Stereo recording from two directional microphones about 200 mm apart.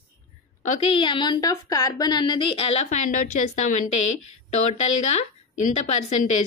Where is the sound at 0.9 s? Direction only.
25° left (ahead or behind).